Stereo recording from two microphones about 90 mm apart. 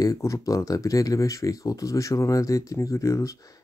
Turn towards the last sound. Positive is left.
turn(degrees=35)  # may be behind; listen again after turning